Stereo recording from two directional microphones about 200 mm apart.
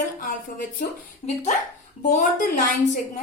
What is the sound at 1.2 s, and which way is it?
Speech, 30° left (ahead or behind).